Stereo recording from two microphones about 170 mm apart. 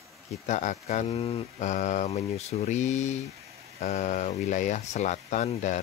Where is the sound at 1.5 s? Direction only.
45° left (ahead or behind).